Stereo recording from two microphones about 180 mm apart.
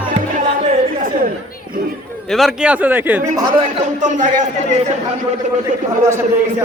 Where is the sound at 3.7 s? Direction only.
45° right (ahead or behind).